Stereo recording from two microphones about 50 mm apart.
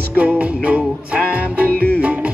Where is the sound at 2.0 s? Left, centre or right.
Right.